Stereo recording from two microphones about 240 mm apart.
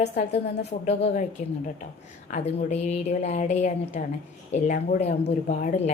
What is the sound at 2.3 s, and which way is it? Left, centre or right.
A woman's voice, left.